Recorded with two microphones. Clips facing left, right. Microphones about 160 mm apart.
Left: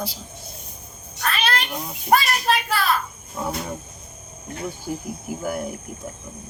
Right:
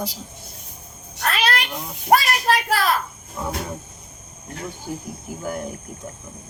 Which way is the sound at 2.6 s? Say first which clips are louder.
Right 3 dB; 65° right (ahead or behind).